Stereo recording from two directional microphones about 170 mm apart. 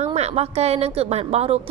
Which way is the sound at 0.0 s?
40° right (ahead or behind).